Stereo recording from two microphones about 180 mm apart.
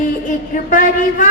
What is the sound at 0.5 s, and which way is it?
Speech, 45° left (ahead or behind).